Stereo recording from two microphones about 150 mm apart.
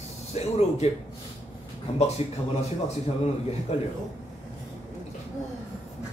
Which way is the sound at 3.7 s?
45° left (ahead or behind).